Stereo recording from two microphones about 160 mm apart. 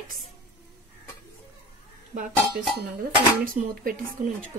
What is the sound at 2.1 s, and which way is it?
Speech, 60° right (ahead or behind).